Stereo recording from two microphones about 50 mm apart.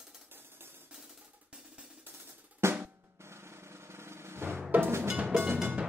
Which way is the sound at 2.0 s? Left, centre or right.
Right.